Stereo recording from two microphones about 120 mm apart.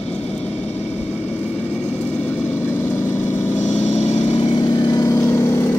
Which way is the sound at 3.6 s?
75° left (ahead or behind).